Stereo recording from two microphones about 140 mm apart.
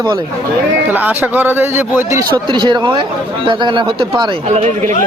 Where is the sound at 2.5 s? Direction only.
35° right (ahead or behind).